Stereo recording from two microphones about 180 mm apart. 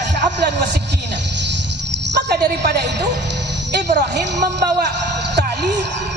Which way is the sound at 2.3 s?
65° right (ahead or behind).